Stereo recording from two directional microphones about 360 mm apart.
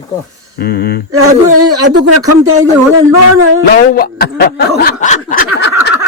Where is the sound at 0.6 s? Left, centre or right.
Left.